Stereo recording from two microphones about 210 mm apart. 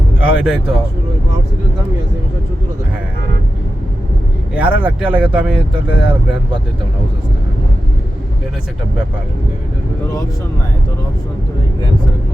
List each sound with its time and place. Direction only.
0.2 s speech: 5° right (ahead or behind)
4.5 s speech: 5° right (ahead or behind)